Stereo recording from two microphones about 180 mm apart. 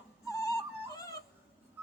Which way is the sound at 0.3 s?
20° left (ahead or behind).